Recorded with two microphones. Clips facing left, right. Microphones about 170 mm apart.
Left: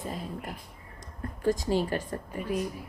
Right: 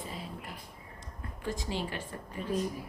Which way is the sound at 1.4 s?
40° left (ahead or behind).